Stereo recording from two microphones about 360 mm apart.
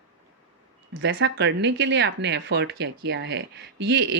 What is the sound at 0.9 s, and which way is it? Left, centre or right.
Speech, right.